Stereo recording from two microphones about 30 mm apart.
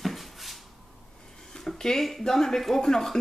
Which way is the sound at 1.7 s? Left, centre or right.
Centre.